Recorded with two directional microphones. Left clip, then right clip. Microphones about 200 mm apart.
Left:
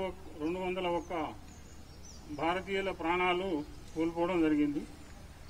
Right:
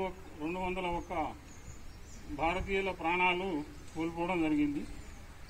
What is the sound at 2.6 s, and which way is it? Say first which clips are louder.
Speech: even; 40° right (ahead or behind).